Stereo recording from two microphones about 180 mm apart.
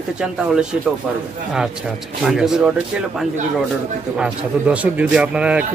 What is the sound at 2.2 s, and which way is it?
A man's voice, 5° right (ahead or behind).